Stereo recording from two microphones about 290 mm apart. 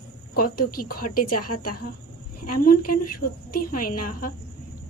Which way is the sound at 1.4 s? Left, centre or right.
Left.